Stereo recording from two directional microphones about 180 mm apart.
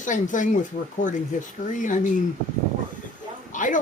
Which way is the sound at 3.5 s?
45° left (ahead or behind).